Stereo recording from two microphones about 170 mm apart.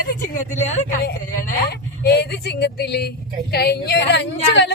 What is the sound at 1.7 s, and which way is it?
Speech, 75° left (ahead or behind).